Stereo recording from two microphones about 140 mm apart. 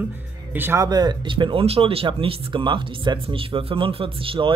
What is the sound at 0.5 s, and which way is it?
Speech, 15° right (ahead or behind).